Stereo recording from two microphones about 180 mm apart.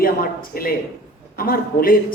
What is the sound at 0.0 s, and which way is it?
A woman's voice, 55° left (ahead or behind).